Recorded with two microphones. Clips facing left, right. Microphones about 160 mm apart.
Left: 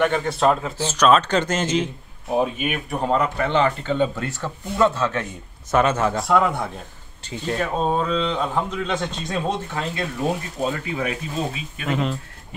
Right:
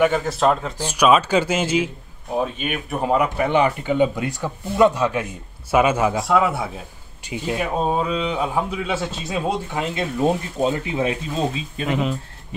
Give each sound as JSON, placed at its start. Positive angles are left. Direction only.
{"t": 0.0, "sound": "speech", "side_deg": 0}
{"t": 0.7, "sound": "speech", "side_deg": -10}
{"t": 11.9, "sound": "speech", "side_deg": -5}